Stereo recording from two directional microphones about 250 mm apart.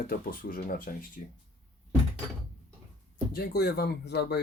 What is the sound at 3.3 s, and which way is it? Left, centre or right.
Speech, left.